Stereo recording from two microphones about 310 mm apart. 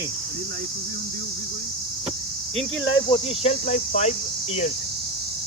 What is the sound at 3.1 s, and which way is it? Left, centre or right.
Speech, centre.